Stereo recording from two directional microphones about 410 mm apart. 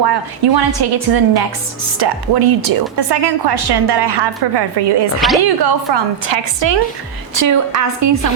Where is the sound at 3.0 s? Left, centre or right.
Right.